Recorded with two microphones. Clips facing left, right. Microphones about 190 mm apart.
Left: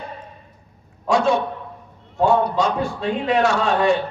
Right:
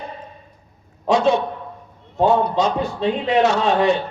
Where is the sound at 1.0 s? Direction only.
20° right (ahead or behind).